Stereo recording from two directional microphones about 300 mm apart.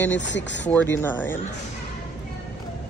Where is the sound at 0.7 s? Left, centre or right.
Centre.